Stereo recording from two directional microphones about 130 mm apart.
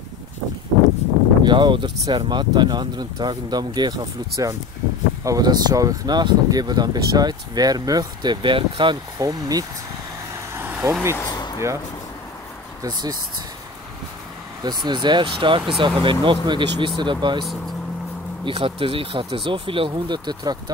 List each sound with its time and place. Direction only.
1.4 s speech: 35° right (ahead or behind)
10.5 s vehicle: 15° right (ahead or behind)
11.2 s a sound: 30° left (ahead or behind)
12.8 s speech: 30° right (ahead or behind)
14.6 s speech: 35° right (ahead or behind)